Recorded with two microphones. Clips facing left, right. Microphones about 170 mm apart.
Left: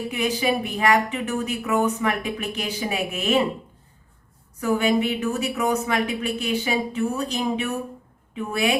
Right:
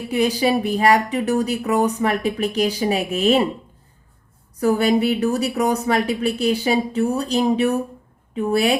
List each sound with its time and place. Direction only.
0.1 s speech: 35° right (ahead or behind)
4.6 s speech: 40° right (ahead or behind)